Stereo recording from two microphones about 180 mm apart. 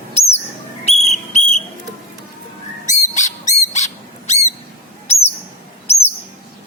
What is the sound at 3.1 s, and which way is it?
Dog, 40° left (ahead or behind).